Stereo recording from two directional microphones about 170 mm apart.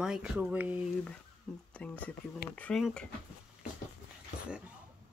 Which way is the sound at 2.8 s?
5° left (ahead or behind).